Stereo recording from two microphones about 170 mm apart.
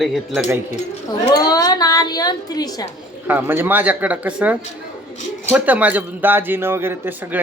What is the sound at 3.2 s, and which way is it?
A man's voice, 10° right (ahead or behind).